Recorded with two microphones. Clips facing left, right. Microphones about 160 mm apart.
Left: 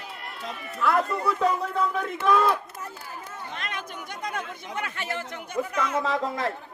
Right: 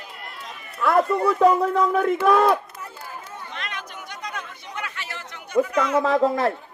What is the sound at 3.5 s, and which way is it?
Chatter, 45° left (ahead or behind).